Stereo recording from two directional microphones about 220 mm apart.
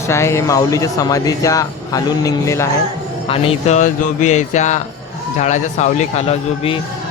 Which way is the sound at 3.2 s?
25° left (ahead or behind).